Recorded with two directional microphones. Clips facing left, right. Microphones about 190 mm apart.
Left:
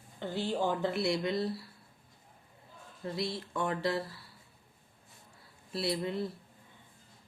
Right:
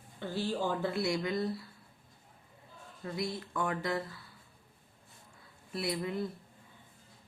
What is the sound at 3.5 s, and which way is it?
Speech, 25° left (ahead or behind).